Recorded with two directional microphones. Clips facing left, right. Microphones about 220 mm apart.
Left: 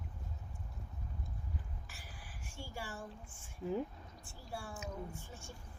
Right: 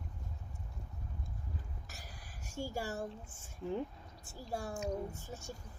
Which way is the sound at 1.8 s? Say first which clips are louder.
Right 2 dB; 40° right (ahead or behind).